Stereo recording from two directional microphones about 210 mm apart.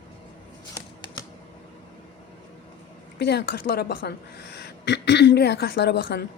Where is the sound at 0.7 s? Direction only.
20° left (ahead or behind).